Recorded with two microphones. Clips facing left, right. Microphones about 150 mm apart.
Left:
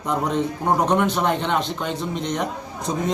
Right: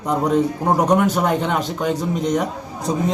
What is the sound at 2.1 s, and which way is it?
Speech, 40° right (ahead or behind).